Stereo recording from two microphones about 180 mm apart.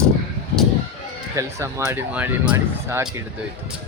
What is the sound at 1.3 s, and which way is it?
Speech, 15° right (ahead or behind).